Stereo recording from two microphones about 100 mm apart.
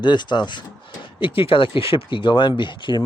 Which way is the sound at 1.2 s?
65° left (ahead or behind).